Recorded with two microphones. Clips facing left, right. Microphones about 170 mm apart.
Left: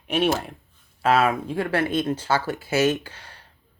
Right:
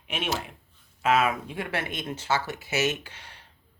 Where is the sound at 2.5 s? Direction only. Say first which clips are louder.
Left 6 dB; 50° left (ahead or behind).